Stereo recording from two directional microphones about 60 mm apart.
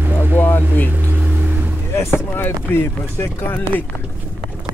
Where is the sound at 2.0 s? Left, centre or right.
Left.